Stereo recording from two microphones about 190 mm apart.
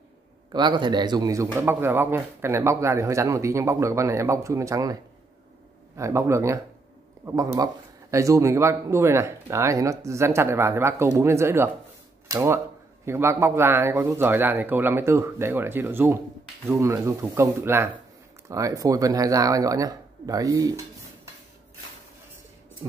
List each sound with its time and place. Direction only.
0.5 s a man's voice: 25° right (ahead or behind)
5.9 s a man's voice: 15° right (ahead or behind)